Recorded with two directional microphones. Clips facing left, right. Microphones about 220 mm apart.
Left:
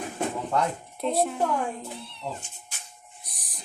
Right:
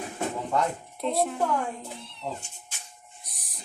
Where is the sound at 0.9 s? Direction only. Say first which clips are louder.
Left 1 dB; centre (ahead or behind).